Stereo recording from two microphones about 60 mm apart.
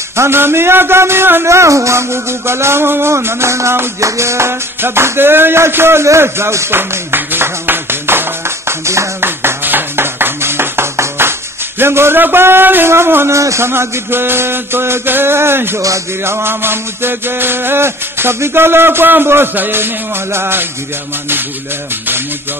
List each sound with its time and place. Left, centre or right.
0.1 s a man's voice: right
6.0 s clapping: right
11.8 s music: right
13.4 s a man's voice: right
13.7 s music: right